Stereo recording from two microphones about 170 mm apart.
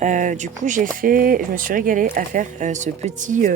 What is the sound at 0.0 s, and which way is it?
Speech, 45° right (ahead or behind).